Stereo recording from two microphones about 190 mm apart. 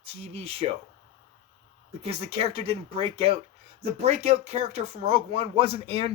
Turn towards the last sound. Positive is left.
turn(degrees=-30)  # may be behind; listen again after turning